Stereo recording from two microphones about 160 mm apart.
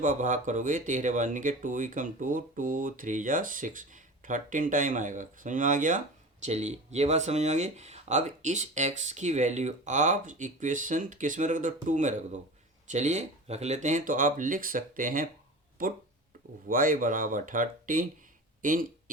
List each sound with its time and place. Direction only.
0.0 s speech: 55° right (ahead or behind)
6.4 s speech: 45° right (ahead or behind)
16.6 s speech: 60° right (ahead or behind)